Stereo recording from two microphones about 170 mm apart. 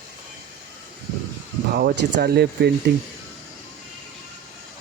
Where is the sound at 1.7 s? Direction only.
65° right (ahead or behind).